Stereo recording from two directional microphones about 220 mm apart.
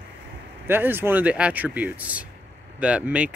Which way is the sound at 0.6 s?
10° right (ahead or behind).